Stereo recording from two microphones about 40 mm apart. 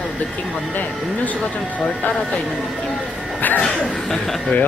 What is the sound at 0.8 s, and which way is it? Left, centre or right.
Speech, left.